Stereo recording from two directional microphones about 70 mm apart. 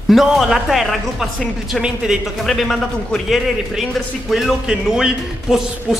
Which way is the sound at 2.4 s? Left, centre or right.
Centre.